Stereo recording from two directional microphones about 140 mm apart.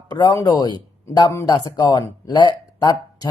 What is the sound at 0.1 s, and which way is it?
Speech, 25° left (ahead or behind).